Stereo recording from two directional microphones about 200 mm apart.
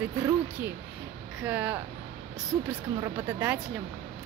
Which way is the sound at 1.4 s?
10° right (ahead or behind).